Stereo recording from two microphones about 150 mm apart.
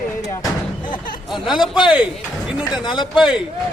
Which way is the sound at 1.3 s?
5° right (ahead or behind).